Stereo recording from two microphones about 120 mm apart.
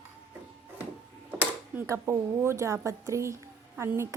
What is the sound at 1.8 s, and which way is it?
A woman's voice, 20° right (ahead or behind).